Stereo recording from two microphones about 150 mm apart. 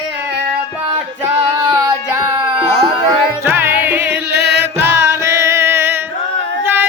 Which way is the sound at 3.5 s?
15° right (ahead or behind).